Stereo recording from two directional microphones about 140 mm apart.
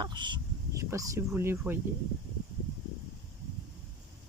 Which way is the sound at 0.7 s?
20° right (ahead or behind).